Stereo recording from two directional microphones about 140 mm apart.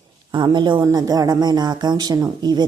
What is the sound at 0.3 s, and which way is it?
Speech, 35° right (ahead or behind).